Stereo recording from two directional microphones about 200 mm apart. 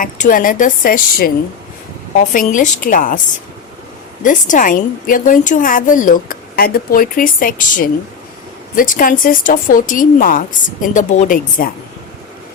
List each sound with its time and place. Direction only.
0.0 s speech: 45° left (ahead or behind)
2.3 s a woman's voice: 40° left (ahead or behind)
4.2 s a woman's voice: 40° left (ahead or behind)